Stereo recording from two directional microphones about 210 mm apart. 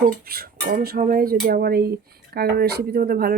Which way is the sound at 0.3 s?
45° right (ahead or behind).